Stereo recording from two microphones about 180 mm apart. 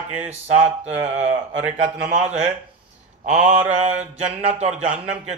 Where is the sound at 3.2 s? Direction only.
45° right (ahead or behind).